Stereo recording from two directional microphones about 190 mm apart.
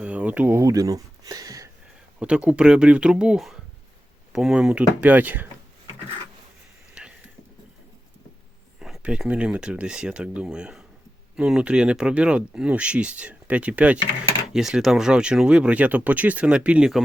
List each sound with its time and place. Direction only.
0.0 s speech: 5° right (ahead or behind)
2.1 s speech: 5° right (ahead or behind)
7.0 s a sound: 5° right (ahead or behind)
8.8 s speech: 5° right (ahead or behind)